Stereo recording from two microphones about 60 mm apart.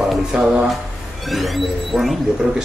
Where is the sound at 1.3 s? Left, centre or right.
Centre.